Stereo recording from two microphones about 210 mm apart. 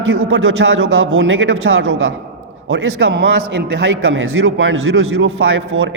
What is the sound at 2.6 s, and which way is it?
A man's voice, 60° right (ahead or behind).